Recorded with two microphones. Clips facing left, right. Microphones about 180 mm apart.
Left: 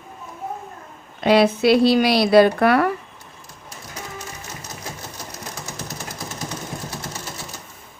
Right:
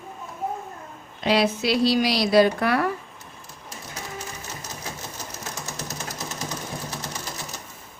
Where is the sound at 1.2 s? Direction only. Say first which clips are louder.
Left 6 dB; 55° left (ahead or behind).